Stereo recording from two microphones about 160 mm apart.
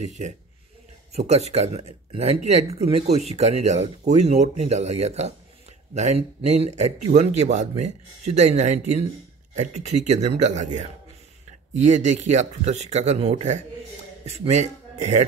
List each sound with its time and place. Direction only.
0.0 s a man's voice: 45° right (ahead or behind)